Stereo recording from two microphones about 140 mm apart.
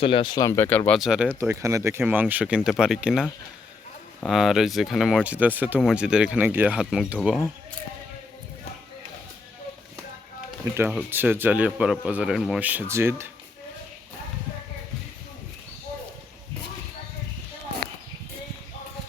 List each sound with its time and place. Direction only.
0.0 s speech: 35° left (ahead or behind); by 0.9 s 15° left (ahead or behind)
0.9 s speech: 5° right (ahead or behind)
1.3 s speech: 20° right (ahead or behind)
11.1 s speech: 15° right (ahead or behind)